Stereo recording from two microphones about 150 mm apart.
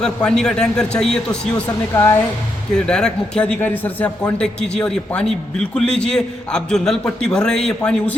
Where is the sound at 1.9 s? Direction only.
20° left (ahead or behind).